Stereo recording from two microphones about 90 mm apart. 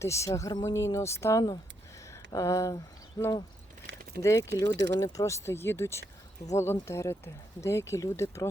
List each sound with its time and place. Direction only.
0.0 s speech: 35° left (ahead or behind)
4.2 s speech: 35° left (ahead or behind)
4.5 s speech: 50° left (ahead or behind)
5.0 s speech: 35° left (ahead or behind)